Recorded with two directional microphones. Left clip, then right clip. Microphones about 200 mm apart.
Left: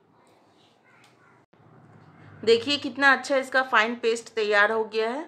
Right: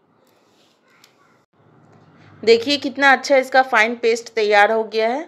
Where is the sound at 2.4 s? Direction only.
25° right (ahead or behind).